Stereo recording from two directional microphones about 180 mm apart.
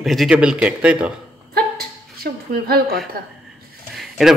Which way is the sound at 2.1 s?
60° right (ahead or behind).